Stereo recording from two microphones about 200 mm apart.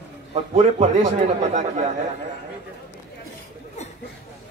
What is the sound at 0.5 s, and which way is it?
A man's voice, 35° right (ahead or behind).